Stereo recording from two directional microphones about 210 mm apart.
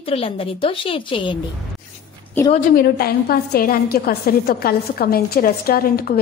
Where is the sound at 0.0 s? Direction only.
25° left (ahead or behind).